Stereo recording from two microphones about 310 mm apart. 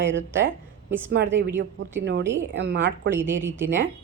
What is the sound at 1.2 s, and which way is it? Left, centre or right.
Speech, right.